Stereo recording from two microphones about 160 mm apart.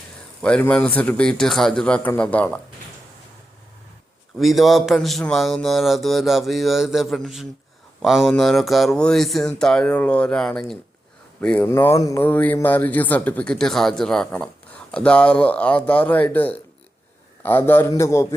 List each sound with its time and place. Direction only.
0.4 s speech: 5° left (ahead or behind)
4.4 s a man's voice: centre (ahead or behind); by 18.3 s 15° left (ahead or behind)